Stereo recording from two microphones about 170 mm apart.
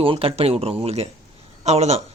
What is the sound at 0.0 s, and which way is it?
A man's voice, 30° right (ahead or behind).